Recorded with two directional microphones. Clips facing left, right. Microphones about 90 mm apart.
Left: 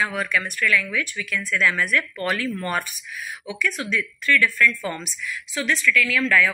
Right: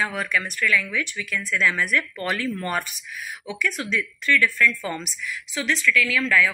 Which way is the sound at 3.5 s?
25° right (ahead or behind).